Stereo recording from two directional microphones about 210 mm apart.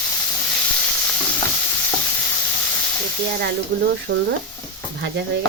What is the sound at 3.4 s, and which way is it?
Speech, 50° right (ahead or behind).